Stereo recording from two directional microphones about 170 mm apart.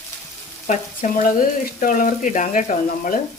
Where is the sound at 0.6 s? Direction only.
50° left (ahead or behind).